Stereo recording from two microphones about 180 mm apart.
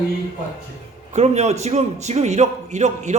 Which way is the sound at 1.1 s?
40° right (ahead or behind).